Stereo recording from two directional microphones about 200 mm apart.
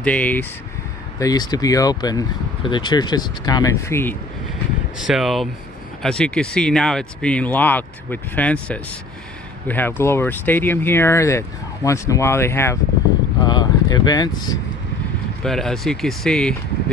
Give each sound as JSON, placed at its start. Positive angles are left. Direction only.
{"t": 0.0, "sound": "speech", "side_deg": 5}
{"t": 1.2, "sound": "speech", "side_deg": 20}
{"t": 4.9, "sound": "speech", "side_deg": 0}
{"t": 15.4, "sound": "speech", "side_deg": 0}